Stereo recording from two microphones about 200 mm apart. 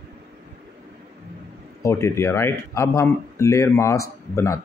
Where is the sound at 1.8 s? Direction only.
15° left (ahead or behind).